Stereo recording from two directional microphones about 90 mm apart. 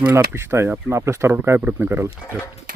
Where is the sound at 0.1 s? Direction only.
30° right (ahead or behind).